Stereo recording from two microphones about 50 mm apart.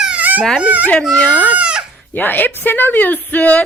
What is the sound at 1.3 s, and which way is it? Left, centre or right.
Goat, right.